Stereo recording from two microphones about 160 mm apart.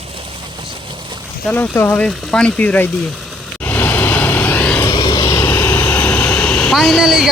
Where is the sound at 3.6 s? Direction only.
10° left (ahead or behind).